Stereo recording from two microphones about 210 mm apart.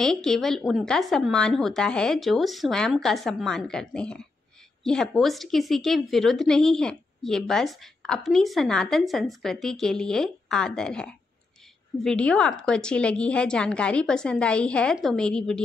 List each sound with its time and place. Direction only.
0.0 s a woman's voice: centre (ahead or behind)